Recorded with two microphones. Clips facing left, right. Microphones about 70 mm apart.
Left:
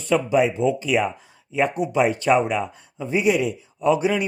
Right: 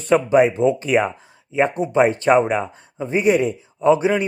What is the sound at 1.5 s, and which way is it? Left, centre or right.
Speech, right.